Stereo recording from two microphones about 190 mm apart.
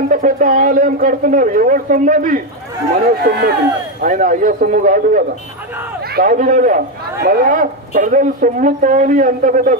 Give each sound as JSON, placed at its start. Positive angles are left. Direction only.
{"t": 0.1, "sound": "speech", "side_deg": -45}
{"t": 3.3, "sound": "speech", "side_deg": -60}
{"t": 4.0, "sound": "speech", "side_deg": -45}